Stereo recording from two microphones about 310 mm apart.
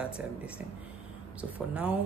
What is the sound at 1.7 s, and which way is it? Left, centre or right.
Speech, centre.